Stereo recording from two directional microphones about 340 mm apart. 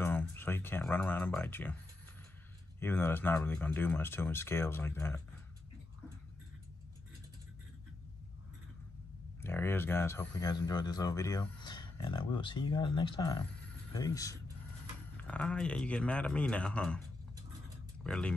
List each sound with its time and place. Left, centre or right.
0.0 s a sound: centre
2.8 s speech: centre
9.4 s a man's voice: centre
18.0 s a man's voice: centre